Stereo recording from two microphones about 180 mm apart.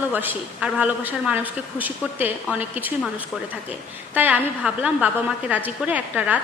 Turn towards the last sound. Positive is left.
turn(degrees=-10)  # may be behind; listen again after turning